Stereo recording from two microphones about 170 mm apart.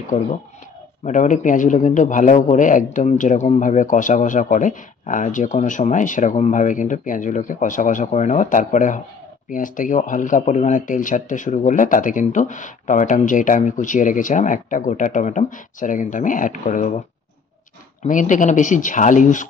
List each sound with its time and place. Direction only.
1.0 s a man's voice: 45° left (ahead or behind)
18.0 s a man's voice: 50° left (ahead or behind)